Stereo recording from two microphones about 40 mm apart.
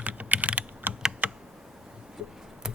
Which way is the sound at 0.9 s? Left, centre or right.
Right.